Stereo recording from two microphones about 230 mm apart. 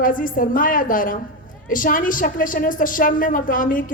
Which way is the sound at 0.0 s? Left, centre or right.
Left.